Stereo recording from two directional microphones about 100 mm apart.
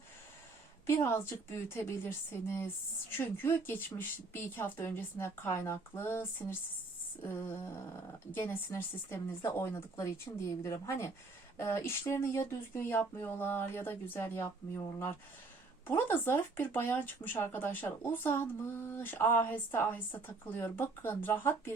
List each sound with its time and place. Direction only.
0.9 s speech: 20° left (ahead or behind)